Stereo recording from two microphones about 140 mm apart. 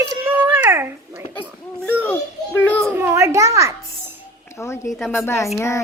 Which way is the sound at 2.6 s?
10° left (ahead or behind).